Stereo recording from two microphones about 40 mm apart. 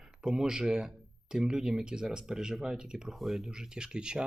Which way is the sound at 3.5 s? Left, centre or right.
Centre.